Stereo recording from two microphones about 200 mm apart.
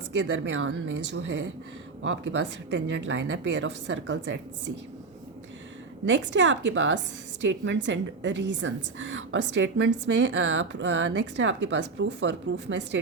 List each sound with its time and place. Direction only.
0.2 s a woman's voice: 65° right (ahead or behind)
6.1 s a woman's voice: 70° right (ahead or behind)